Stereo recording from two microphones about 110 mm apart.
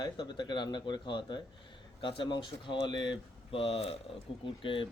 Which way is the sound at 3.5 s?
60° left (ahead or behind).